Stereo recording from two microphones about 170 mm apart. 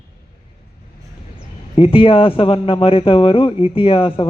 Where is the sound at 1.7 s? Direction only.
30° left (ahead or behind).